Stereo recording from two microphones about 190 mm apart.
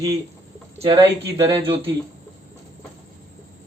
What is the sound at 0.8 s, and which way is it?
Speech, 30° right (ahead or behind).